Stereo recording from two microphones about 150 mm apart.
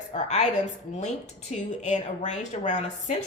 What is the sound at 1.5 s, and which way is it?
A woman's voice, 50° left (ahead or behind).